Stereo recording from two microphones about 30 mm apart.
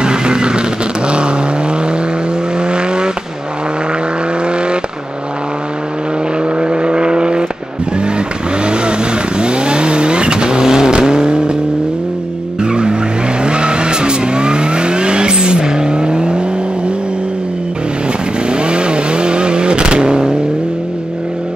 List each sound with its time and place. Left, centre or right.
0.0 s vehicle: right
6.6 s vehicle: right
9.4 s vehicle: right
13.4 s vehicle: right
18.5 s vehicle: right